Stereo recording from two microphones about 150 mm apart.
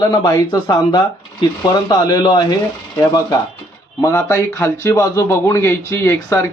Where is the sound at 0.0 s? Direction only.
25° left (ahead or behind).